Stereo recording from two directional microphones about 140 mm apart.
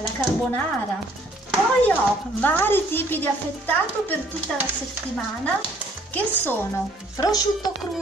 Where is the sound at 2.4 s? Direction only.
15° left (ahead or behind).